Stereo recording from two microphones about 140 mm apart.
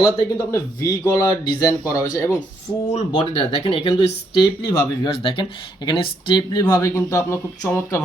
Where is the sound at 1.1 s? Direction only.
25° left (ahead or behind).